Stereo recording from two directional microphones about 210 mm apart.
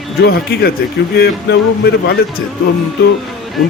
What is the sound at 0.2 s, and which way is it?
Speech, 50° left (ahead or behind).